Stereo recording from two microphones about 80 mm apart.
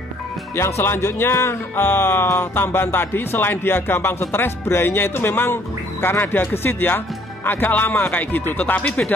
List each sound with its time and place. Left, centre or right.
0.6 s speech: left; by 9.0 s centre